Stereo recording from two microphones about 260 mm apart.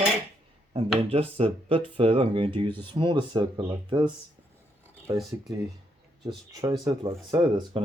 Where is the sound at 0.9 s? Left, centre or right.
Right.